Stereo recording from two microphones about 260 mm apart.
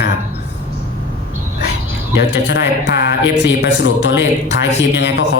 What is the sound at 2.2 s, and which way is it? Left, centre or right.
Speech, left.